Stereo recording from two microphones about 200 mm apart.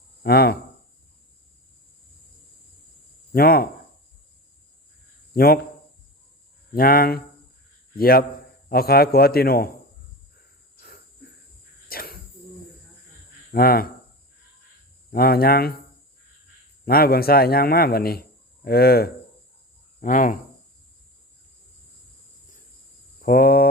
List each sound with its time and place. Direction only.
0.2 s speech: 50° left (ahead or behind)
3.3 s speech: 50° left (ahead or behind)
5.3 s speech: 50° left (ahead or behind)
6.7 s speech: 50° left (ahead or behind)
11.9 s insect: 50° left (ahead or behind)
13.5 s speech: 50° left (ahead or behind)
15.1 s speech: 50° left (ahead or behind)
16.8 s speech: 50° left (ahead or behind)
23.2 s speech: 45° left (ahead or behind)